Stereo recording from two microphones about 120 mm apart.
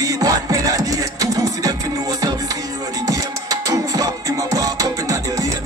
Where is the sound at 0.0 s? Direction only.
30° right (ahead or behind).